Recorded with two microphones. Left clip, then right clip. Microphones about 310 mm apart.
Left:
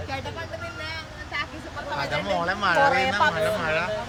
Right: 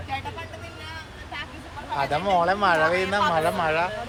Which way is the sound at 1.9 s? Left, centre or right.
Centre.